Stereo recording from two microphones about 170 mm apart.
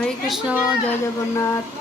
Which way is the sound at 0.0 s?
Centre (ahead or behind).